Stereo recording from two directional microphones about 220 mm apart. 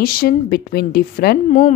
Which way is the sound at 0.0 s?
40° left (ahead or behind).